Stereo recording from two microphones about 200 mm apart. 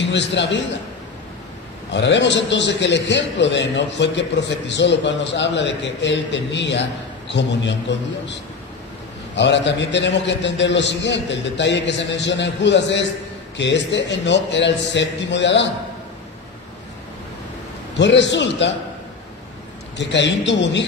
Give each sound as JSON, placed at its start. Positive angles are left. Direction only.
{"t": 0.0, "sound": "a man's voice", "side_deg": 60}
{"t": 1.9, "sound": "a man's voice", "side_deg": 60}
{"t": 17.9, "sound": "a man's voice", "side_deg": 60}
{"t": 20.0, "sound": "a man's voice", "side_deg": 60}